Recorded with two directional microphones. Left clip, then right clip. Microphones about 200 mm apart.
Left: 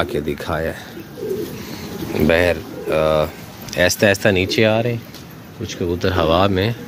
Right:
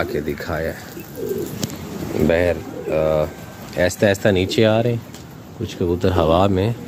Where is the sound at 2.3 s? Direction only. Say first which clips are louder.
Left 3 dB; centre (ahead or behind).